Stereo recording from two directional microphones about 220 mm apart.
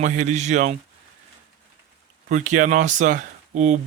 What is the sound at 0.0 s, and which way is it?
Speech, 35° right (ahead or behind).